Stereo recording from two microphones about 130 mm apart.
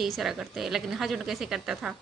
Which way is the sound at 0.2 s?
Centre (ahead or behind).